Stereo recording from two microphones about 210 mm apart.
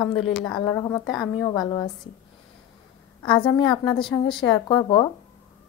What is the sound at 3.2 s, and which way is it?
A woman's voice, 20° left (ahead or behind).